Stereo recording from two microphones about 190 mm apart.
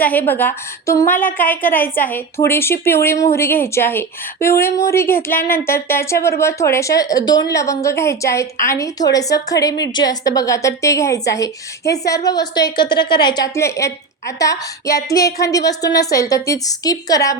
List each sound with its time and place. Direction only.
0.0 s a woman's voice: 10° left (ahead or behind)